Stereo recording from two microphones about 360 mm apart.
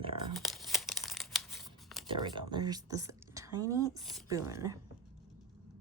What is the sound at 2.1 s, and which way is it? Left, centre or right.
A woman's voice, centre.